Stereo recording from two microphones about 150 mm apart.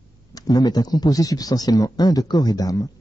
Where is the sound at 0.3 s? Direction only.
25° left (ahead or behind).